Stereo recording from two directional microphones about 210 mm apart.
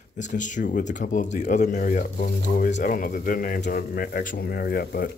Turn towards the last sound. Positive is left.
turn(degrees=50)  # may be behind; listen again after turning